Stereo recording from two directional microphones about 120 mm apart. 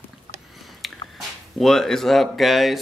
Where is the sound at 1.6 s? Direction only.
5° left (ahead or behind).